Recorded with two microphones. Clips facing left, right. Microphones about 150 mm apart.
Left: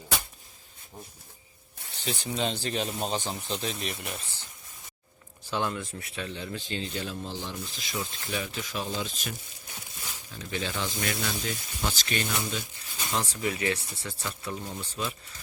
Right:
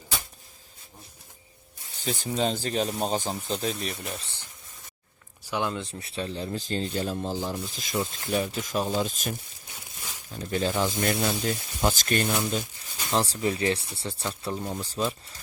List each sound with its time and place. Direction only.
2.0 s speech: 40° right (ahead or behind)
5.5 s speech: 15° right (ahead or behind)
5.8 s speech: 30° right (ahead or behind)
10.3 s speech: 45° right (ahead or behind)
13.1 s speech: 35° right (ahead or behind)